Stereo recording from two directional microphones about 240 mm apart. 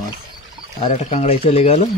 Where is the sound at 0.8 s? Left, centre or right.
Left.